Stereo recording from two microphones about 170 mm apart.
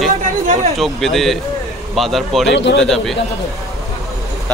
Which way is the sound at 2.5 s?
90° left.